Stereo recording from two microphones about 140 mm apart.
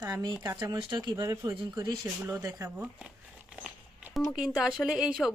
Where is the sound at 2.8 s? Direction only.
5° right (ahead or behind).